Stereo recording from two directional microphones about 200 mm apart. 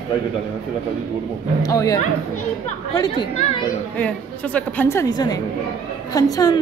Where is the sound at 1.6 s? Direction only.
15° left (ahead or behind).